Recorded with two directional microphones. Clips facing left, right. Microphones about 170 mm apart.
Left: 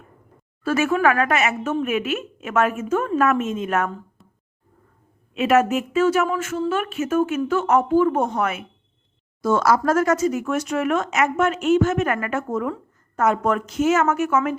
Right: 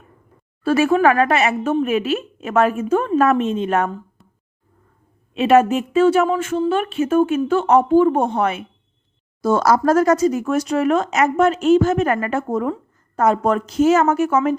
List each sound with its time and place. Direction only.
0.6 s speech: 30° right (ahead or behind)
5.3 s a woman's voice: 30° right (ahead or behind)